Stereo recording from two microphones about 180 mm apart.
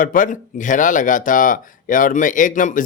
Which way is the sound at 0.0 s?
50° left (ahead or behind).